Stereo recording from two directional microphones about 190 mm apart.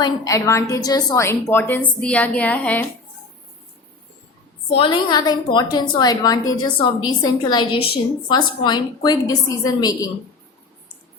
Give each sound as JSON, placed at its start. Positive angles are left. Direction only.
{"t": 0.0, "sound": "a woman's voice", "side_deg": 15}
{"t": 4.7, "sound": "a woman's voice", "side_deg": 25}